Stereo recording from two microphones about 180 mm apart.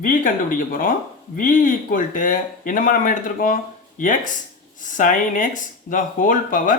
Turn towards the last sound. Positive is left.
turn(degrees=50)  # may be behind; listen again after turning